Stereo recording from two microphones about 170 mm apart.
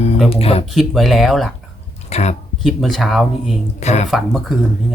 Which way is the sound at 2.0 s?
40° left (ahead or behind).